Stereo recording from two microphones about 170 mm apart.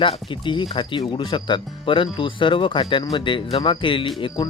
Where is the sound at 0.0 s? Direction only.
30° left (ahead or behind).